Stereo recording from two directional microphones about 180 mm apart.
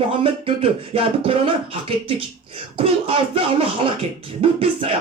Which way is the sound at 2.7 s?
30° right (ahead or behind).